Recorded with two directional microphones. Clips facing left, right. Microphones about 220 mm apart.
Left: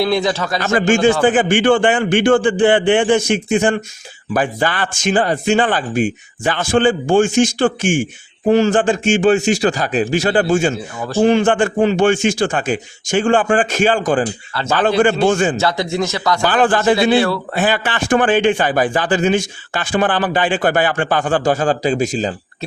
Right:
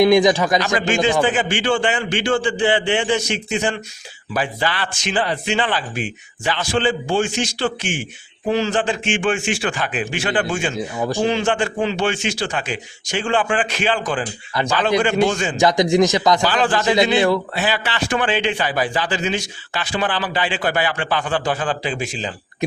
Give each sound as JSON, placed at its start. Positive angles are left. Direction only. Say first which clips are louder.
{"t": 0.0, "sound": "speech", "louder": "right 4 dB", "side_deg": -15}
{"t": 0.8, "sound": "a man's voice", "louder": "left 9 dB", "side_deg": 45}
{"t": 10.8, "sound": "speech", "louder": "right 2 dB", "side_deg": -15}
{"t": 11.2, "sound": "a man's voice", "louder": "left 8 dB", "side_deg": 50}
{"t": 14.5, "sound": "speech", "louder": "right 1 dB", "side_deg": -15}
{"t": 15.3, "sound": "a man's voice", "louder": "left 7 dB", "side_deg": 50}
{"t": 15.5, "sound": "speech", "louder": "right 3 dB", "side_deg": -15}
{"t": 16.4, "sound": "a man's voice", "louder": "left 4 dB", "side_deg": 50}
{"t": 17.2, "sound": "speech", "louder": "left 1 dB", "side_deg": -15}
{"t": 17.5, "sound": "a man's voice", "louder": "left 5 dB", "side_deg": 50}